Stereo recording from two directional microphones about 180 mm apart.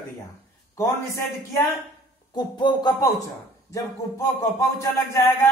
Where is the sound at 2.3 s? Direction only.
25° left (ahead or behind).